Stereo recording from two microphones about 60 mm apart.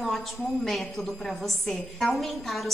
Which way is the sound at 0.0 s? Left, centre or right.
Centre.